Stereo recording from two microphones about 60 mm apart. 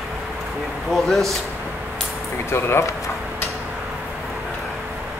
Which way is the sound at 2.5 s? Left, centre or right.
Left.